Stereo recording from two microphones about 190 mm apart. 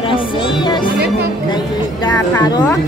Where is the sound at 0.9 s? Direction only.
55° right (ahead or behind).